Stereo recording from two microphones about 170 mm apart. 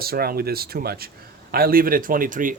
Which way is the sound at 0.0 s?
60° right (ahead or behind).